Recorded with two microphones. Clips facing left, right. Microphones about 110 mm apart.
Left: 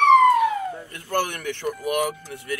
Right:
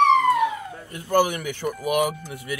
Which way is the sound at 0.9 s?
10° right (ahead or behind).